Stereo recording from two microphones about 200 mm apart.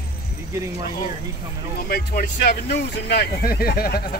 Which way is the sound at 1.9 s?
50° left (ahead or behind).